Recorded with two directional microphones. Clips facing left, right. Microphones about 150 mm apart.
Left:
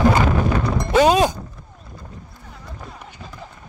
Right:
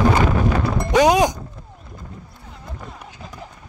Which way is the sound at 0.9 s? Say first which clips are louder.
Even; 15° right (ahead or behind).